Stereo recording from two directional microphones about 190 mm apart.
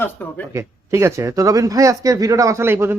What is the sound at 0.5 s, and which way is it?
Speech, 15° right (ahead or behind).